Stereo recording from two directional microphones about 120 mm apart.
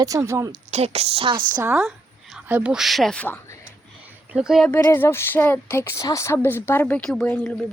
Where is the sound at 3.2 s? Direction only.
20° left (ahead or behind).